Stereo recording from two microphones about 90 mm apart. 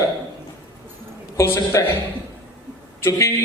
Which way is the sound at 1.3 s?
30° left (ahead or behind).